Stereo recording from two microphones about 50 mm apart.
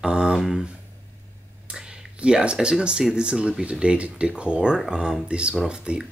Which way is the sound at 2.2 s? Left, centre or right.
Centre.